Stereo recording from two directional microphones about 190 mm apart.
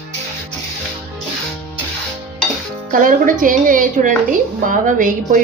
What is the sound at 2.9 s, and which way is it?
A woman's voice, 45° right (ahead or behind).